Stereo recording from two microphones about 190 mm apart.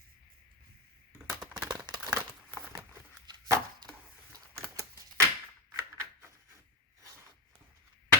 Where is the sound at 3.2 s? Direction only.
20° right (ahead or behind).